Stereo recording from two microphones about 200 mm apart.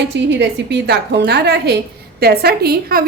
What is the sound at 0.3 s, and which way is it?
A woman's voice, 60° right (ahead or behind).